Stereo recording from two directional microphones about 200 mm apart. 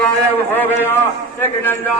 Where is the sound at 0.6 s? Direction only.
10° left (ahead or behind).